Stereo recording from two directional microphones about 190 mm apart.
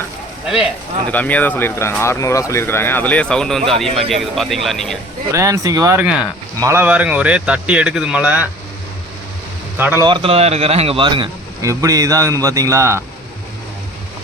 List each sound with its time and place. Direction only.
0.4 s speech: 5° right (ahead or behind)
1.1 s speech: 10° left (ahead or behind)
5.3 s speech: 15° right (ahead or behind)
9.7 s speech: 10° right (ahead or behind)
10.1 s speech: 30° right (ahead or behind)